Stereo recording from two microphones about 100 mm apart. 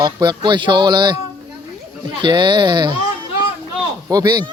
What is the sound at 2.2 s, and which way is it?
Speech, 50° right (ahead or behind).